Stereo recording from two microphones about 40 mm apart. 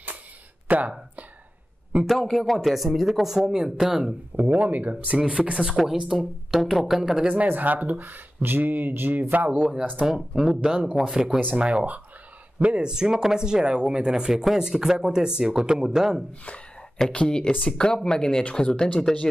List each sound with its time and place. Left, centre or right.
0.7 s a sound: right
2.0 s speech: centre
4.4 s speech: right
5.1 s speech: centre
6.1 s speech: centre
7.0 s speech: centre
7.4 s speech: right
9.5 s speech: right
10.0 s speech: centre
10.6 s speech: right
17.0 s speech: centre